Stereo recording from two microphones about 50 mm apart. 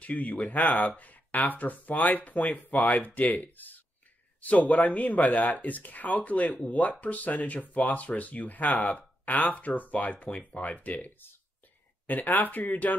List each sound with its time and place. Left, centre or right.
0.0 s speech: left